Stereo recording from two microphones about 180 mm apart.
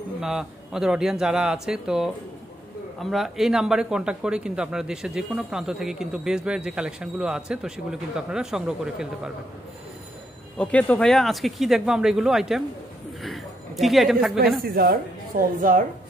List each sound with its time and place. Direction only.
0.2 s a man's voice: 5° right (ahead or behind)
10.6 s a man's voice: 10° left (ahead or behind)
13.2 s a sound: centre (ahead or behind)
14.6 s a woman's voice: 55° right (ahead or behind)